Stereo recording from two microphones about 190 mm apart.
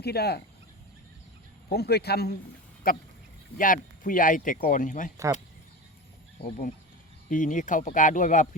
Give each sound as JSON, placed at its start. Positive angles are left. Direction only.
{"t": 0.0, "sound": "speech", "side_deg": 55}
{"t": 1.7, "sound": "speech", "side_deg": 55}
{"t": 5.1, "sound": "speech", "side_deg": -15}
{"t": 7.3, "sound": "speech", "side_deg": 45}